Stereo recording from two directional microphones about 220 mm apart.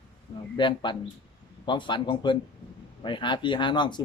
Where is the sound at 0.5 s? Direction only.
20° left (ahead or behind).